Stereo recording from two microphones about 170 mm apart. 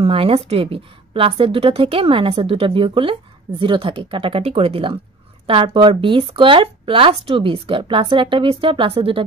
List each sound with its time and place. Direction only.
0.0 s a woman's voice: 35° right (ahead or behind)